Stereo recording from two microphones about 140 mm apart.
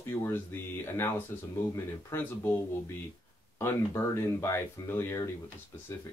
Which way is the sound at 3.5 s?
20° left (ahead or behind).